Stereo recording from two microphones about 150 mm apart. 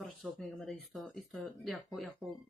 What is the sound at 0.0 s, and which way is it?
Speech, 5° left (ahead or behind).